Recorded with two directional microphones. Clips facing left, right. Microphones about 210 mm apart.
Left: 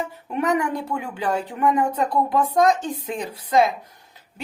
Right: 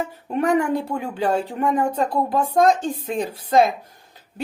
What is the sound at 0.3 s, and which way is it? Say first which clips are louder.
Speech: right 2 dB; 45° right (ahead or behind).